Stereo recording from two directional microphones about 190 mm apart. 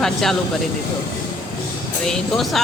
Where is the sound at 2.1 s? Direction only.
Centre (ahead or behind).